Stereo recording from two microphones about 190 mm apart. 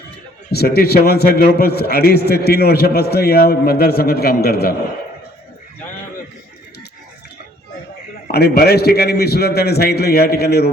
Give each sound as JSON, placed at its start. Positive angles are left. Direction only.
{"t": 0.5, "sound": "a man's voice", "side_deg": 55}
{"t": 8.3, "sound": "a man's voice", "side_deg": 55}